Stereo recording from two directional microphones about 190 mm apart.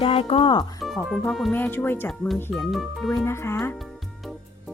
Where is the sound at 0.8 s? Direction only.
Centre (ahead or behind).